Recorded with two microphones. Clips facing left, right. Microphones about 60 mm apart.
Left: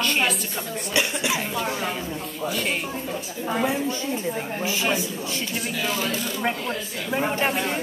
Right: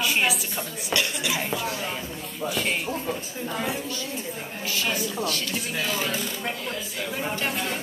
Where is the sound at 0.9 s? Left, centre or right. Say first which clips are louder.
Left 2 dB; left.